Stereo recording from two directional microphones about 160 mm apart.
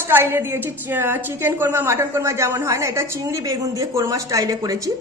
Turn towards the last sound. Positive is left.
turn(degrees=-20)  # may be behind; listen again after turning